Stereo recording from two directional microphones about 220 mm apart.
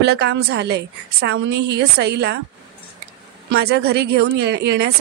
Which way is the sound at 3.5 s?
45° right (ahead or behind).